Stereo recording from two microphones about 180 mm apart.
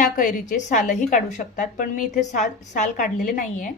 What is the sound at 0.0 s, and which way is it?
A woman's voice, 45° left (ahead or behind).